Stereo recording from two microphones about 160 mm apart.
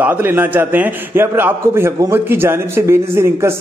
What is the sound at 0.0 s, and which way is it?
A man's voice, 15° right (ahead or behind).